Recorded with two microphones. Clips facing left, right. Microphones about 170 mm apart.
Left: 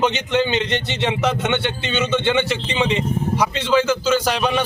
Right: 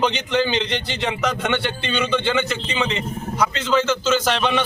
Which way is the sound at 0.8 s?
25° left (ahead or behind).